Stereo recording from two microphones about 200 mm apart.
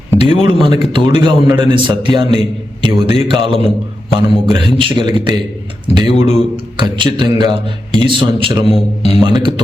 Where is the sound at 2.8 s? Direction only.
25° right (ahead or behind).